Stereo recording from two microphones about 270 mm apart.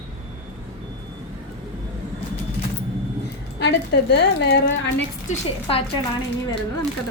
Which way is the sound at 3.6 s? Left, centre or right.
Left.